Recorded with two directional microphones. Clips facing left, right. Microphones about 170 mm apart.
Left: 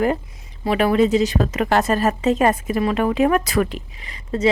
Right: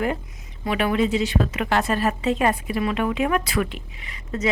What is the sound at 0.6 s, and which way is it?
A woman's voice, 35° left (ahead or behind).